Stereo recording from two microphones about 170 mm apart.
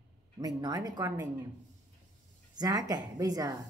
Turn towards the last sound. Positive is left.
turn(degrees=-20)  # may be behind; listen again after turning